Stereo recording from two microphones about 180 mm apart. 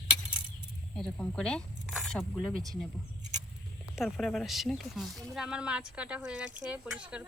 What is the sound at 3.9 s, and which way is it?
Speech, centre (ahead or behind).